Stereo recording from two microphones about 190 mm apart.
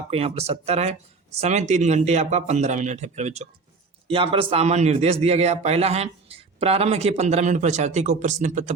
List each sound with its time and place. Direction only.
0.1 s a man's voice: 30° right (ahead or behind)